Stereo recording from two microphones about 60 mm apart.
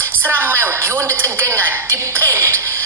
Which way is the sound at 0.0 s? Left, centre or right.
Right.